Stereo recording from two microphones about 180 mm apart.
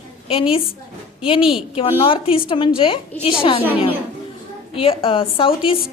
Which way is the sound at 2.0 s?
30° left (ahead or behind).